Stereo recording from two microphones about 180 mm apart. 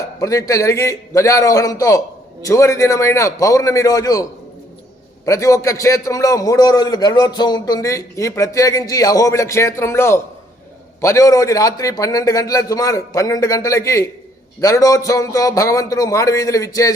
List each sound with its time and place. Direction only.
0.2 s a man's voice: 20° left (ahead or behind)